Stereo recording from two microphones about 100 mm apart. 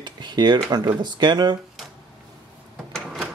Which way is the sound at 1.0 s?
45° right (ahead or behind).